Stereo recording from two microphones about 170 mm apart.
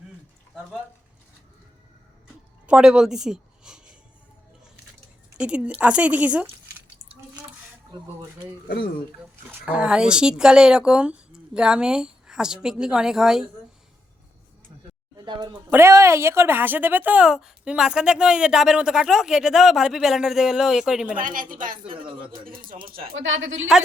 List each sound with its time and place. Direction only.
2.6 s a sound: 5° right (ahead or behind)
5.4 s a woman's voice: 5° right (ahead or behind)
8.6 s speech: 65° left (ahead or behind)
9.3 s a woman's voice: 10° right (ahead or behind)
15.1 s a woman's voice: 25° right (ahead or behind); by 21.2 s 5° right (ahead or behind)
21.2 s a woman's voice: 50° right (ahead or behind)
23.1 s speech: 90° right